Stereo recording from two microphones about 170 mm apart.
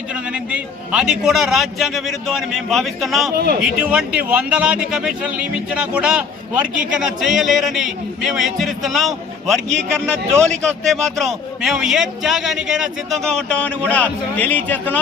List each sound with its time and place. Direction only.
0.1 s a man's voice: 5° right (ahead or behind)
3.3 s speech: 65° right (ahead or behind)
3.6 s a man's voice: 5° right (ahead or behind); by 14.9 s 10° left (ahead or behind)